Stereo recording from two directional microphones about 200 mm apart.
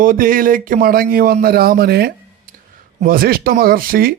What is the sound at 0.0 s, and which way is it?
Speech, 45° right (ahead or behind).